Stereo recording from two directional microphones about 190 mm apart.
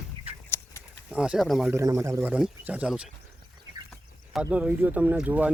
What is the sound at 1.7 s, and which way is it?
Speech, 15° right (ahead or behind).